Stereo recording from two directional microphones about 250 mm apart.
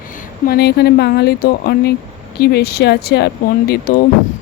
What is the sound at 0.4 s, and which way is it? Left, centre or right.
Speech, left.